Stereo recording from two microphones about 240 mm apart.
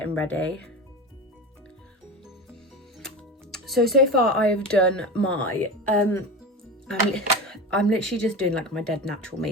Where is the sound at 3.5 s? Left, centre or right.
Centre.